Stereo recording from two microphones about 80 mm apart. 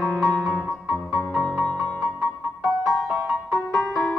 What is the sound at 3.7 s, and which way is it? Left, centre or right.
Music, left.